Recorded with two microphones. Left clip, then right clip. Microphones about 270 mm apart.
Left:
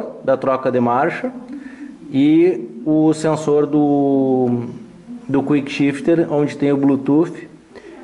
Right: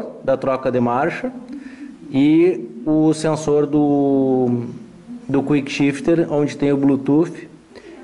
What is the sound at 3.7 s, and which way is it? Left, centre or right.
Speech, left.